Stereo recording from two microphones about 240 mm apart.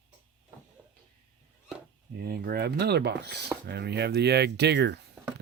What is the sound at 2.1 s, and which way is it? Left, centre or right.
Speech, right.